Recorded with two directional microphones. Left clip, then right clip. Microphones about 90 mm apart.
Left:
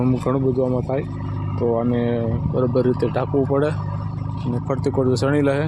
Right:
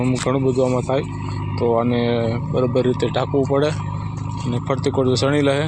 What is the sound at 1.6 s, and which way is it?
Speech, 15° left (ahead or behind).